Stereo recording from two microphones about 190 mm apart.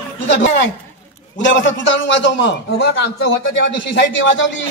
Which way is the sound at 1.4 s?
75° left (ahead or behind).